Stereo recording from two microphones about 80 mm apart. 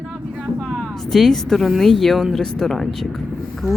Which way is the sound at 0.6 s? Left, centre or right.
Centre.